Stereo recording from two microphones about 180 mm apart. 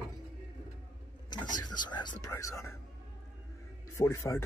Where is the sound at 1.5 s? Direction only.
25° left (ahead or behind).